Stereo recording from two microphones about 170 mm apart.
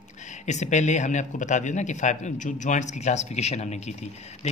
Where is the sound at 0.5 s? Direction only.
45° left (ahead or behind).